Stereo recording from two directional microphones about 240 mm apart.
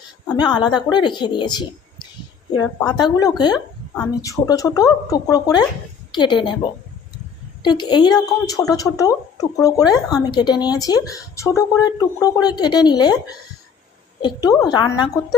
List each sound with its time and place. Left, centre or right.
0.3 s a woman's voice: centre
7.6 s speech: centre
14.2 s speech: centre